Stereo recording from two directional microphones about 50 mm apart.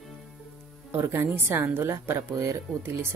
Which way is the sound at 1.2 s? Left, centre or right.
Right.